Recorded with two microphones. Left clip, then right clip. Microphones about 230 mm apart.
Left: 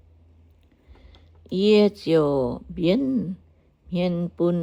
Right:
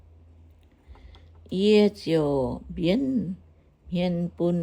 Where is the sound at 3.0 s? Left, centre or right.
Left.